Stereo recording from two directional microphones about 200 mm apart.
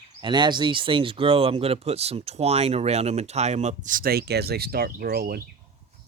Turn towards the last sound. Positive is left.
turn(degrees=-50)  # may be behind; listen again after turning